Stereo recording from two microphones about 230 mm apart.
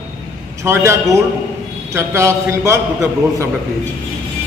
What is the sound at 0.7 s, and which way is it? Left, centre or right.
A man's voice, centre.